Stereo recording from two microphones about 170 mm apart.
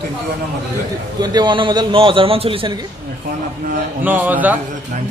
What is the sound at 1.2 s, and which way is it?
A man's voice, 25° right (ahead or behind).